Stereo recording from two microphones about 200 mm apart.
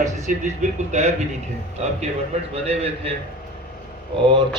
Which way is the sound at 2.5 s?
30° right (ahead or behind).